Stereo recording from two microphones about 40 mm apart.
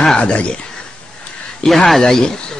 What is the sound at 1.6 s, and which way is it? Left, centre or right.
Speech, centre.